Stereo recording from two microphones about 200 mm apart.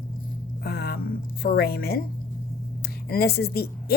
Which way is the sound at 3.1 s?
50° left (ahead or behind).